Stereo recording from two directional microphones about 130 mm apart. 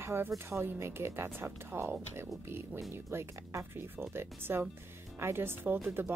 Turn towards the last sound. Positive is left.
turn(degrees=-15)  # may be behind; listen again after turning